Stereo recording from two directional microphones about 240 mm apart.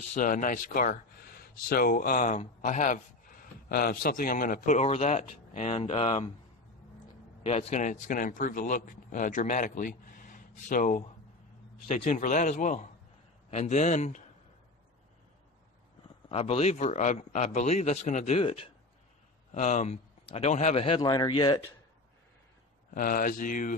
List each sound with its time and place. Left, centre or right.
0.1 s a man's voice: left
7.4 s a man's voice: left
16.3 s a man's voice: left
23.0 s a man's voice: left